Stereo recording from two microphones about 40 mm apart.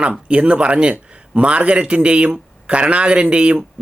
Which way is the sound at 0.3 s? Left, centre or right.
Right.